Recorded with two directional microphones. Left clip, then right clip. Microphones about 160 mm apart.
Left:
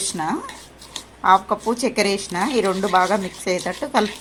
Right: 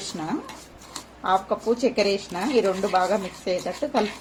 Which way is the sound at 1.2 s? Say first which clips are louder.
Left 7 dB; 60° left (ahead or behind).